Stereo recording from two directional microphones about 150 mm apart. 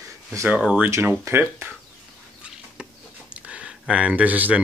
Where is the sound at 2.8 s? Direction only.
10° right (ahead or behind).